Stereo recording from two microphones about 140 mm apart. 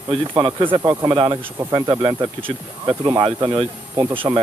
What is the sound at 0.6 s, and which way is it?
Speech, 35° right (ahead or behind).